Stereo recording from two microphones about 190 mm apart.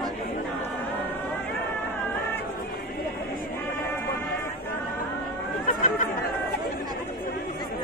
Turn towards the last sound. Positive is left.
turn(degrees=45)  # may be behind; listen again after turning